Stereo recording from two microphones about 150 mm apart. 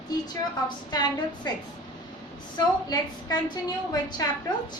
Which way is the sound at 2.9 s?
25° left (ahead or behind).